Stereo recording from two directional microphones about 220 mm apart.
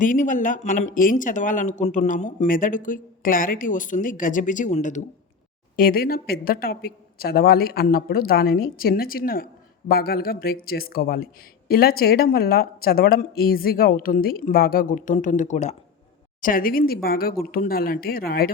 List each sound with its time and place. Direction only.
0.0 s speech: 35° left (ahead or behind)